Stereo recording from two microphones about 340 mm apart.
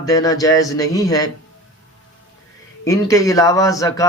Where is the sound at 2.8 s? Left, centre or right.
Centre.